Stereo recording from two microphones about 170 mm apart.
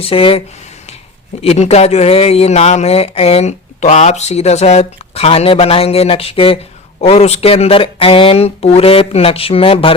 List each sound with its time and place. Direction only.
0.0 s speech: 35° left (ahead or behind)